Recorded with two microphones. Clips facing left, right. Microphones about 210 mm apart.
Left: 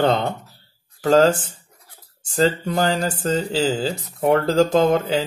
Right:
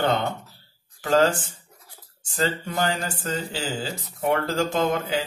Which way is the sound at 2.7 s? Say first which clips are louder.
Left 6 dB; 35° left (ahead or behind).